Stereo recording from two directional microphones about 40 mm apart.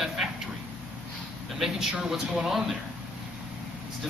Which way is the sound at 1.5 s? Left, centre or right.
Centre.